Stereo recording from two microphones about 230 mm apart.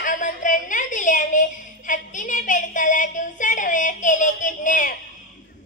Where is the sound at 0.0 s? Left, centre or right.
Left.